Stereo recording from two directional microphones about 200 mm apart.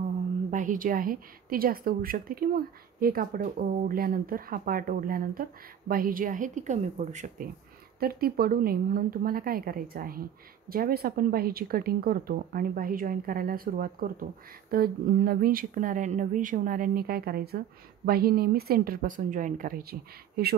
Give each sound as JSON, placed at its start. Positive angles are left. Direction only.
{"t": 0.5, "sound": "a woman's voice", "side_deg": -40}
{"t": 8.0, "sound": "a woman's voice", "side_deg": -50}